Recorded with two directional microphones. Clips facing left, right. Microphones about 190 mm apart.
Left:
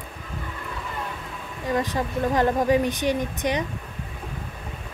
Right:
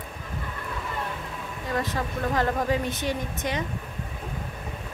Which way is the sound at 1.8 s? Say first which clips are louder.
Left 3 dB; 20° left (ahead or behind).